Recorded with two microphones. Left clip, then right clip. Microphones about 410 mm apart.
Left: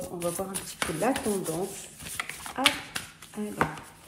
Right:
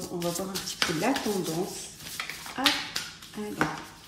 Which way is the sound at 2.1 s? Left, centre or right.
Centre.